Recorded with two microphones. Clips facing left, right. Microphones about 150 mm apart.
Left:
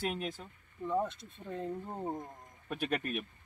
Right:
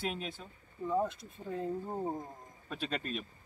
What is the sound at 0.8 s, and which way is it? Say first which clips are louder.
Speech: right 1 dB; 5° right (ahead or behind).